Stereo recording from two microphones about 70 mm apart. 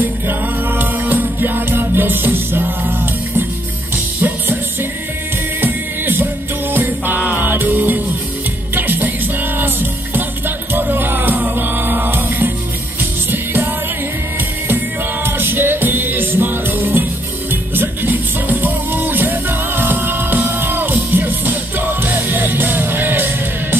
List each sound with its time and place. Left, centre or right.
0.0 s music: right
5.6 s music: right
15.2 s music: right